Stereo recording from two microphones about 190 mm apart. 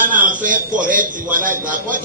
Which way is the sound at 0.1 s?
45° right (ahead or behind).